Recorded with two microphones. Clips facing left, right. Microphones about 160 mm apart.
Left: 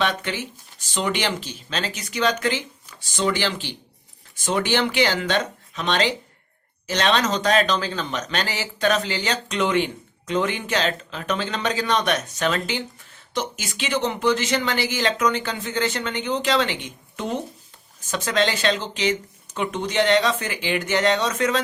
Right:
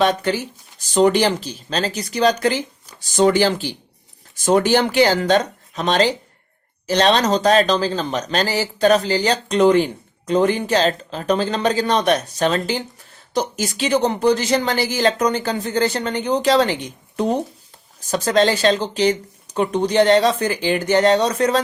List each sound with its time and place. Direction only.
0.0 s speech: 40° right (ahead or behind)